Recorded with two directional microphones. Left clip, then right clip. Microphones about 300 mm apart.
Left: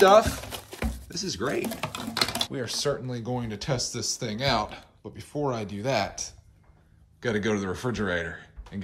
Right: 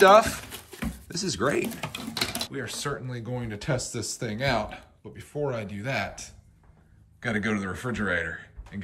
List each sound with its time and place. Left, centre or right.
0.0 s speech: centre
0.5 s a sound: left
1.0 s speech: centre